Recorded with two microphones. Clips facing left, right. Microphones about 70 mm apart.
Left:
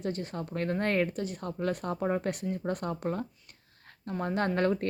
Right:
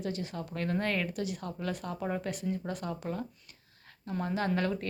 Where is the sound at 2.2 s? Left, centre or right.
Left.